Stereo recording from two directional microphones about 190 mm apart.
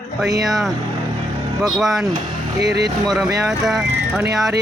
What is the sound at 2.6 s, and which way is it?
Speech, 60° right (ahead or behind).